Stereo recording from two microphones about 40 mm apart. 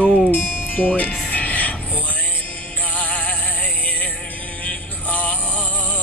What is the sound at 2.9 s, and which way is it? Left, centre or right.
Music, left.